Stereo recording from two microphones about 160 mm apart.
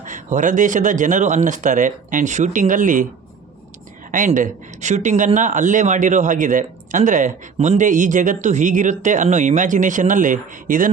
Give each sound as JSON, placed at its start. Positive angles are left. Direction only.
{"t": 0.0, "sound": "speech", "side_deg": -55}
{"t": 4.4, "sound": "speech", "side_deg": -50}